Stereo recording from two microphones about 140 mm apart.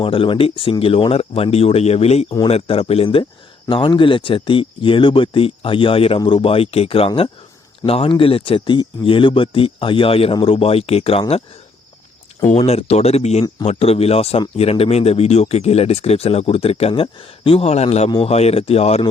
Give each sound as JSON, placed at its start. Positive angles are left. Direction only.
{"t": 0.0, "sound": "speech", "side_deg": 40}
{"t": 12.5, "sound": "speech", "side_deg": 50}